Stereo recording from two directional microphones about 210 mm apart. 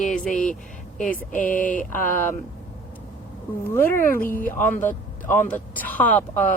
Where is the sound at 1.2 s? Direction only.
10° left (ahead or behind).